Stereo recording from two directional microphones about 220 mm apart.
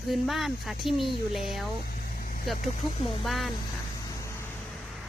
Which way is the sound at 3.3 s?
Centre (ahead or behind).